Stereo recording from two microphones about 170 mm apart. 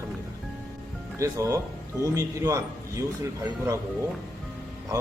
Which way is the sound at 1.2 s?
20° right (ahead or behind).